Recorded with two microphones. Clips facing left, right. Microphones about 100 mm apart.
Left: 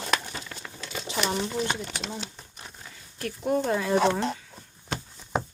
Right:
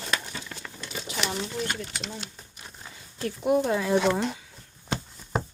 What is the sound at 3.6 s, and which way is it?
Speech, centre (ahead or behind).